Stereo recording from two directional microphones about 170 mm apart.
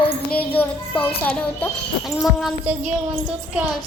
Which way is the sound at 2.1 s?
Centre (ahead or behind).